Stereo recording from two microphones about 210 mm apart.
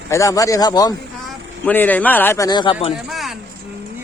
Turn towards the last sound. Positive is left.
turn(degrees=0)  # may be behind; listen again after turning